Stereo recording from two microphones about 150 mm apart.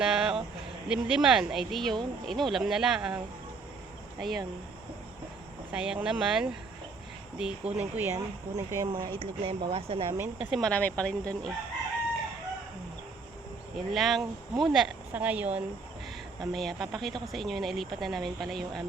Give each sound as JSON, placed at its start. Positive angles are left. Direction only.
{"t": 0.0, "sound": "a sound", "side_deg": -5}
{"t": 0.9, "sound": "speech", "side_deg": -5}
{"t": 4.2, "sound": "speech", "side_deg": 0}
{"t": 5.7, "sound": "speech", "side_deg": -5}
{"t": 8.1, "sound": "speech", "side_deg": -20}
{"t": 9.0, "sound": "speech", "side_deg": -40}
{"t": 10.3, "sound": "speech", "side_deg": -5}
{"t": 13.7, "sound": "speech", "side_deg": 0}